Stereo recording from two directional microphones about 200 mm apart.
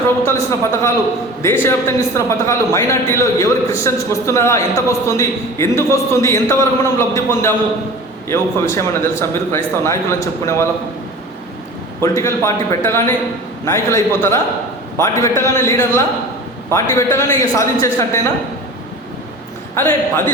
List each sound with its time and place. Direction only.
0.3 s a man's voice: 15° left (ahead or behind)
12.0 s a man's voice: 15° left (ahead or behind)
19.7 s a man's voice: 10° left (ahead or behind)